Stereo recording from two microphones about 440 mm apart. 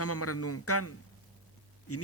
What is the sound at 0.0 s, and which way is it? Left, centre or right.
A man's voice, left.